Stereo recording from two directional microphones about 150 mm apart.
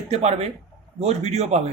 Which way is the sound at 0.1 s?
45° right (ahead or behind).